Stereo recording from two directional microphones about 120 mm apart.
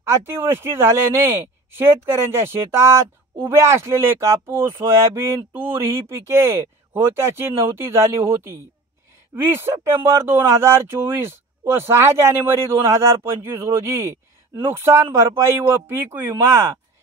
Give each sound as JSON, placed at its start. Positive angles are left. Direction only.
{"t": 0.0, "sound": "speech", "side_deg": -20}